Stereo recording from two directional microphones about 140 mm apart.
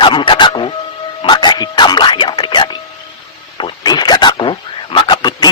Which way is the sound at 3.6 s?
35° left (ahead or behind).